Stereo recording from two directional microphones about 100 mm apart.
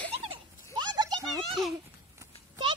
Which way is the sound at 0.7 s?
45° right (ahead or behind).